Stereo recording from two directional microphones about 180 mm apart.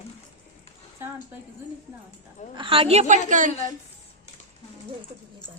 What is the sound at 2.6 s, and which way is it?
Speech, 30° right (ahead or behind).